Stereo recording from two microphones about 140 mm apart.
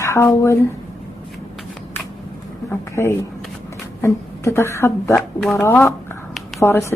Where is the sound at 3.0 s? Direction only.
20° left (ahead or behind).